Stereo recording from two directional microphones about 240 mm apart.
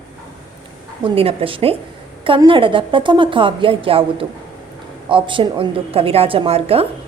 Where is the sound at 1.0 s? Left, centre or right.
Right.